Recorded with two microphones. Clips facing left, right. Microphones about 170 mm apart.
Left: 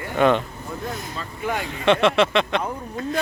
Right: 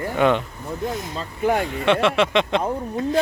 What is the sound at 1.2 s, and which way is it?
Speech, 40° right (ahead or behind).